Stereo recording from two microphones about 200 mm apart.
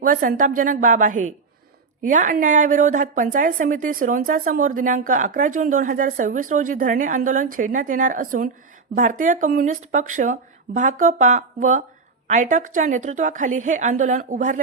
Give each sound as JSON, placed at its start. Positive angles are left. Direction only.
{"t": 0.0, "sound": "a woman's voice", "side_deg": -45}